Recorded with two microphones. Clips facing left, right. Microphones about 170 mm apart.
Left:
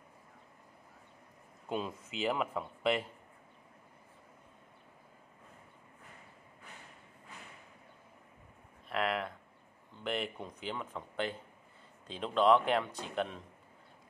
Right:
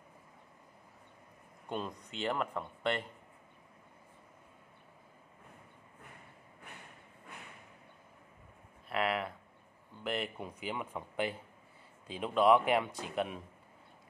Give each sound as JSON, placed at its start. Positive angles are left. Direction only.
{"t": 1.7, "sound": "speech", "side_deg": 5}
{"t": 8.8, "sound": "a sound", "side_deg": 0}
{"t": 10.0, "sound": "speech", "side_deg": 0}